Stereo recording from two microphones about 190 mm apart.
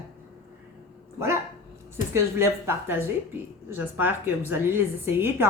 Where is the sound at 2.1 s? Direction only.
15° right (ahead or behind).